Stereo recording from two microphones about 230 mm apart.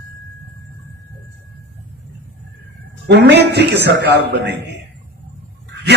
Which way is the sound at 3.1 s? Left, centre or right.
Right.